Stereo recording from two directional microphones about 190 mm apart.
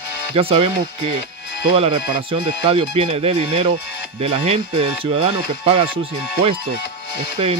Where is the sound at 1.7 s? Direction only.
25° right (ahead or behind).